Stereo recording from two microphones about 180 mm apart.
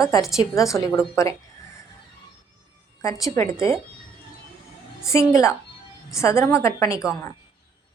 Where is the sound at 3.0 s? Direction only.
20° left (ahead or behind).